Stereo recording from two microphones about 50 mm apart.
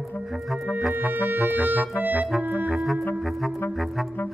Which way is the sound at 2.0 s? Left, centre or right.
Right.